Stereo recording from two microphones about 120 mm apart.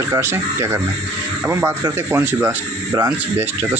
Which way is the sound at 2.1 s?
15° right (ahead or behind).